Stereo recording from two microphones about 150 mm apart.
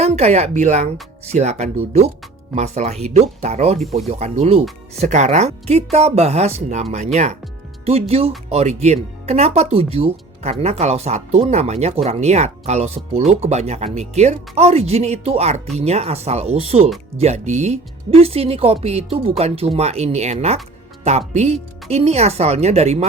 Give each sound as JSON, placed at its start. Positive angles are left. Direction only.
{"t": 0.0, "sound": "speech", "side_deg": -45}